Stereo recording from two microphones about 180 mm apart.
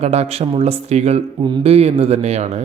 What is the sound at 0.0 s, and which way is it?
Speech, 35° right (ahead or behind).